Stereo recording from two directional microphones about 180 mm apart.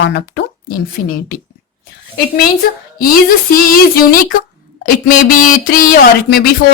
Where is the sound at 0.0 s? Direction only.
65° left (ahead or behind).